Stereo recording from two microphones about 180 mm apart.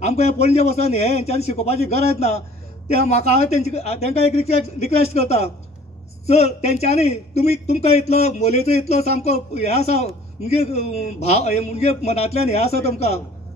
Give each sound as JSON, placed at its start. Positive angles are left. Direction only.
{"t": 0.0, "sound": "a man's voice", "side_deg": 35}